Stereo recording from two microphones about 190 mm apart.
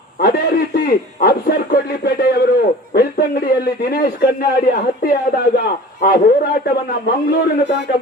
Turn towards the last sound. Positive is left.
turn(degrees=60)  # may be behind; listen again after turning